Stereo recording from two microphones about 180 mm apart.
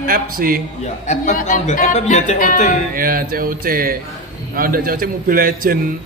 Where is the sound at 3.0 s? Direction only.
55° right (ahead or behind).